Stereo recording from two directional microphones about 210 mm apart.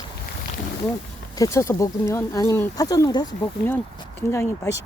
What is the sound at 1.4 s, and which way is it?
Speech, 15° left (ahead or behind).